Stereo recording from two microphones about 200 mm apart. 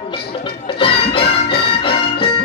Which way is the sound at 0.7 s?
25° left (ahead or behind).